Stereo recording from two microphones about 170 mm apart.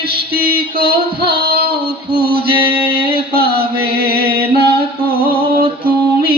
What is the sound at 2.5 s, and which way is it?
Mantra, 30° right (ahead or behind).